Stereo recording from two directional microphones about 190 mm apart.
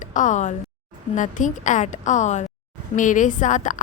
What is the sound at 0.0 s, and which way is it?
A woman's voice, 40° left (ahead or behind).